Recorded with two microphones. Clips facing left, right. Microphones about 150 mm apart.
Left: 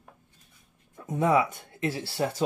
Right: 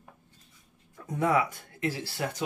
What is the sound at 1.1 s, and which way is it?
Speech, 20° left (ahead or behind).